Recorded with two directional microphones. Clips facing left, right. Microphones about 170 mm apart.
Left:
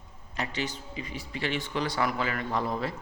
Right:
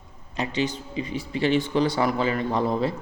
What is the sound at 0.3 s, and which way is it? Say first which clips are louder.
A man's voice: right 7 dB; 20° right (ahead or behind).